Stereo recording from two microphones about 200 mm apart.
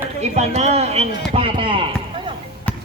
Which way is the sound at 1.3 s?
25° right (ahead or behind).